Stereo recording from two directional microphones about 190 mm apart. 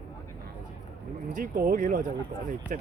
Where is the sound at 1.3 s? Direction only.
45° right (ahead or behind).